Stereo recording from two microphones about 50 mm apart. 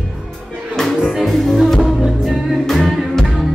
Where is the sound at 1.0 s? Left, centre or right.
Centre.